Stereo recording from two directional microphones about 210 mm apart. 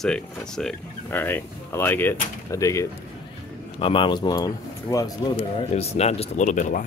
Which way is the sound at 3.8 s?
25° left (ahead or behind).